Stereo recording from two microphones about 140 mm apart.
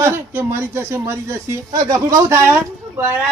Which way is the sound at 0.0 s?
15° right (ahead or behind).